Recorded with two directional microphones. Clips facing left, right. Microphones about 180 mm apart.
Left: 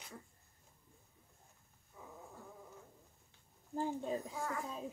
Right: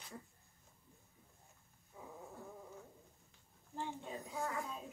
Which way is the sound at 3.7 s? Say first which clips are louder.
Left 7 dB; 35° left (ahead or behind).